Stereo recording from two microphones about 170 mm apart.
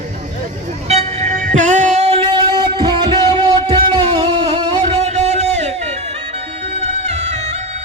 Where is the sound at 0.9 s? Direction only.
40° right (ahead or behind).